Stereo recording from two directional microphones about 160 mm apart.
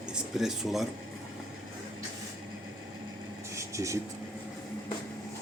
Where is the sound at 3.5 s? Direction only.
20° right (ahead or behind).